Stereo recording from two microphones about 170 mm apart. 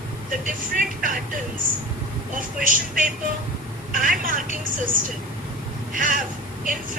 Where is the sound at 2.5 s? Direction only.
55° right (ahead or behind).